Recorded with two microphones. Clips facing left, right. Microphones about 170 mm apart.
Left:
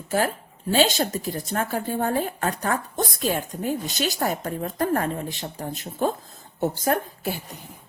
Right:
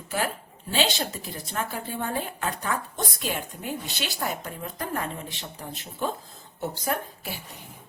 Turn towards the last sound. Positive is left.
turn(degrees=45)  # may be behind; listen again after turning